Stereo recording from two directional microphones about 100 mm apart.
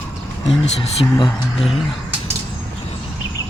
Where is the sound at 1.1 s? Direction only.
60° left (ahead or behind).